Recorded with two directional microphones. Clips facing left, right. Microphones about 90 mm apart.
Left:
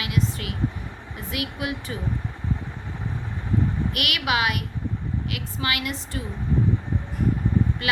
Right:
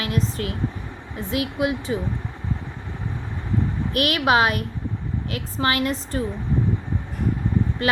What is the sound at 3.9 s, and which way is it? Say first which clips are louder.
A woman's voice: right 8 dB; 35° right (ahead or behind).